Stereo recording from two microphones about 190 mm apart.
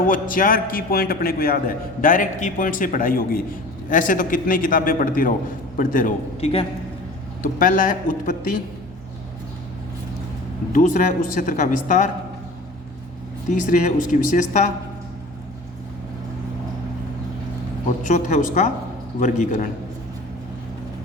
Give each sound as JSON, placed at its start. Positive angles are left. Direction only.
{"t": 0.0, "sound": "a man's voice", "side_deg": 45}
{"t": 6.4, "sound": "speech", "side_deg": 30}
{"t": 7.4, "sound": "a man's voice", "side_deg": 45}
{"t": 10.7, "sound": "speech", "side_deg": 45}
{"t": 13.5, "sound": "speech", "side_deg": 40}
{"t": 17.8, "sound": "speech", "side_deg": 40}